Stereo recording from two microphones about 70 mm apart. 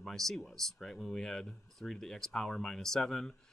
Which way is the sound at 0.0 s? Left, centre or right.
Centre.